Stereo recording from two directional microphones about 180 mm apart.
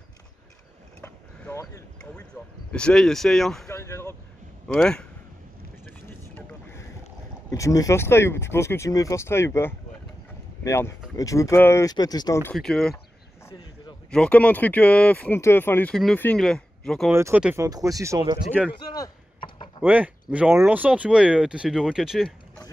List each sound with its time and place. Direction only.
1.0 s boat: 15° left (ahead or behind)
2.7 s speech: 5° left (ahead or behind)
3.6 s a sound: 15° left (ahead or behind)
4.7 s speech: 5° left (ahead or behind)
6.0 s vehicle: 15° left (ahead or behind)
7.5 s speech: 20° left (ahead or behind)
12.5 s speech: 5° left (ahead or behind)
14.1 s speech: 5° left (ahead or behind)
17.1 s speech: 10° right (ahead or behind)
17.6 s speech: 20° right (ahead or behind)
18.9 s chop: 25° left (ahead or behind)
19.8 s speech: 10° right (ahead or behind)